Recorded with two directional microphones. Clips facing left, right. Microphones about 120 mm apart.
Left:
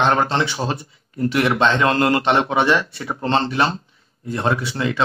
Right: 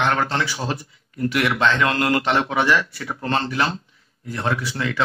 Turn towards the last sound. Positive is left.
turn(degrees=25)  # may be behind; listen again after turning